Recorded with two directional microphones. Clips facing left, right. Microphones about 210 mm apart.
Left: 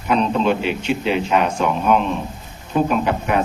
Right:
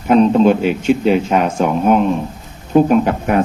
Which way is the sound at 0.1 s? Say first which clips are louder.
Right 7 dB; 45° right (ahead or behind).